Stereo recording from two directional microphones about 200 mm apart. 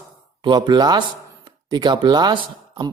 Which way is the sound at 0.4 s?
20° right (ahead or behind).